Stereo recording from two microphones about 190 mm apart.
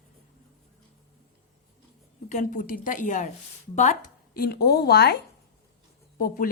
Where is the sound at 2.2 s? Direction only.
40° left (ahead or behind); by 5.2 s 60° left (ahead or behind).